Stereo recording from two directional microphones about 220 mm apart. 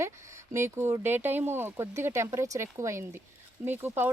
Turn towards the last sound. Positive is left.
turn(degrees=-10)  # may be behind; listen again after turning